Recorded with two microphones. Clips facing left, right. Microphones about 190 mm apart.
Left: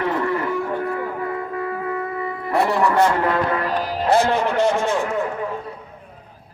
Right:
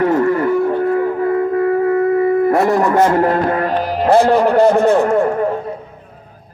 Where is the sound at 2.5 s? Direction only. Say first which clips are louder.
Right 5 dB; 45° right (ahead or behind).